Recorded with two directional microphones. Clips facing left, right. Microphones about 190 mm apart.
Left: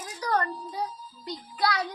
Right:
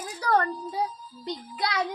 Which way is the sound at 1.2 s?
20° right (ahead or behind).